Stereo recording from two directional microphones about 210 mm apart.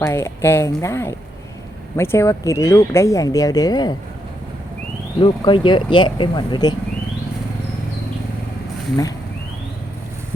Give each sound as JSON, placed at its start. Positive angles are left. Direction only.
{"t": 0.0, "sound": "speech", "side_deg": 15}
{"t": 5.2, "sound": "speech", "side_deg": 20}